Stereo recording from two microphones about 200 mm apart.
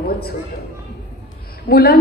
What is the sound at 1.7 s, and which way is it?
Speech, 50° left (ahead or behind).